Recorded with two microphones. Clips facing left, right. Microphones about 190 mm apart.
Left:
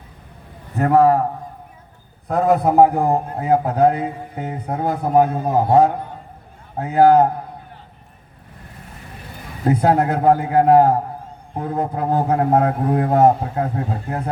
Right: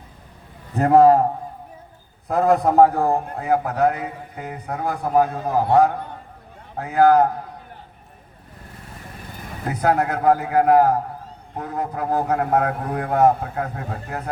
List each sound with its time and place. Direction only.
0.9 s a man's voice: 30° right (ahead or behind)
2.2 s a man's voice: centre (ahead or behind); by 7.3 s 25° left (ahead or behind)
9.6 s a man's voice: 25° left (ahead or behind)